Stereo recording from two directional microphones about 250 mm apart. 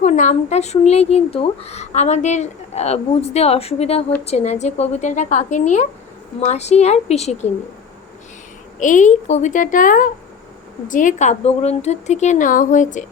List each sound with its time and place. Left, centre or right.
0.0 s speech: left
8.8 s a woman's voice: left